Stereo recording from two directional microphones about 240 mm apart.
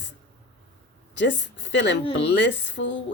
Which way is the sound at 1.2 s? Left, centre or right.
Left.